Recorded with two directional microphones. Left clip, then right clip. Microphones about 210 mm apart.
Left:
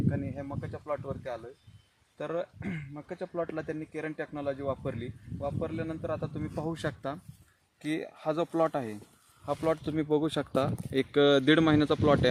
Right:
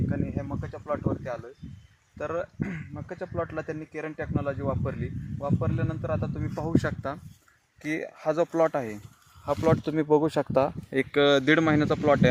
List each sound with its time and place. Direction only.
0.1 s a sound: centre (ahead or behind)
2.1 s speech: centre (ahead or behind)
7.8 s speech: 15° right (ahead or behind)
9.5 s speech: 35° right (ahead or behind); by 10.7 s 15° right (ahead or behind)
10.9 s speech: centre (ahead or behind)